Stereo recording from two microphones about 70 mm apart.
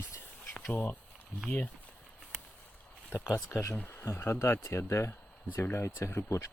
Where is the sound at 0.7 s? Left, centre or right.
Left.